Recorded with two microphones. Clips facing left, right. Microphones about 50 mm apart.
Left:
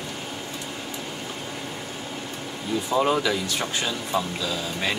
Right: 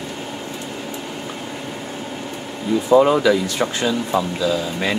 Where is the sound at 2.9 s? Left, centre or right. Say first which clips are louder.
Right 9 dB; right.